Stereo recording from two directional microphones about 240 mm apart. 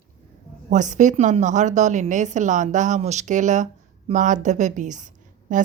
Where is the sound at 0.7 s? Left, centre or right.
Right.